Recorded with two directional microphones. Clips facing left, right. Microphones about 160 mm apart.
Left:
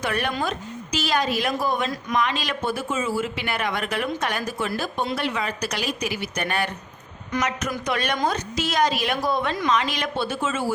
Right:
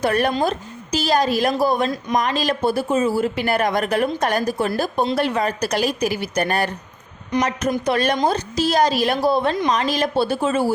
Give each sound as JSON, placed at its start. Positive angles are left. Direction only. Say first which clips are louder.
{"t": 0.0, "sound": "speech", "louder": "right 7 dB", "side_deg": -40}